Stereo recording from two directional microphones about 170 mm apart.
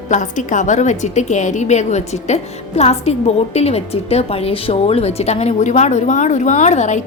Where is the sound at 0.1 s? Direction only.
45° left (ahead or behind).